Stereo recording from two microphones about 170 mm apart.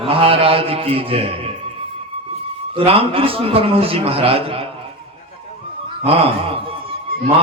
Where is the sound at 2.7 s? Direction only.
35° right (ahead or behind).